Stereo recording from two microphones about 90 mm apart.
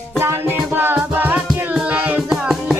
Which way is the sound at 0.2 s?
25° right (ahead or behind).